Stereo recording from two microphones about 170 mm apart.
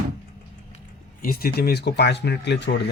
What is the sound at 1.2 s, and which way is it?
Speech, 65° left (ahead or behind).